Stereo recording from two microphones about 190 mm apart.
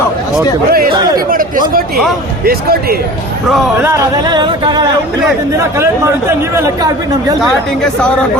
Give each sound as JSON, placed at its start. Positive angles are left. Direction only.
{"t": 0.7, "sound": "speech", "side_deg": -50}
{"t": 0.9, "sound": "a sound", "side_deg": -20}
{"t": 1.3, "sound": "speech", "side_deg": -45}
{"t": 3.8, "sound": "a sound", "side_deg": -20}
{"t": 5.5, "sound": "speech", "side_deg": -15}
{"t": 7.4, "sound": "speech", "side_deg": 5}